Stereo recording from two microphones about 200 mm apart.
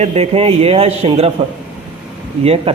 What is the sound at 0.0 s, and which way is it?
Speech, 30° right (ahead or behind).